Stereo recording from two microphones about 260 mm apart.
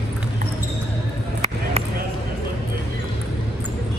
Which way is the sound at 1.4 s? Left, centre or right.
Right.